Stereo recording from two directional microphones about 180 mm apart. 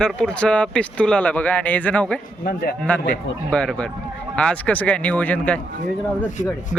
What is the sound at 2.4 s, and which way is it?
Speech, 55° left (ahead or behind).